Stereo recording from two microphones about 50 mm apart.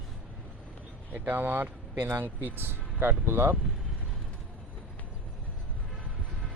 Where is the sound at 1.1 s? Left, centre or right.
Right.